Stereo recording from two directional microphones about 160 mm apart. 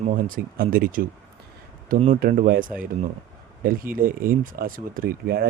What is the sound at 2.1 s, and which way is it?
Speech, 60° right (ahead or behind).